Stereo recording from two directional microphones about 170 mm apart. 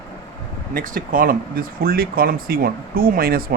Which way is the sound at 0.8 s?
55° right (ahead or behind).